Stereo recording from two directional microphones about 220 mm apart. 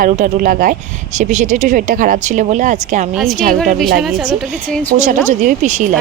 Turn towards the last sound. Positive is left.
turn(degrees=-35)  # may be behind; listen again after turning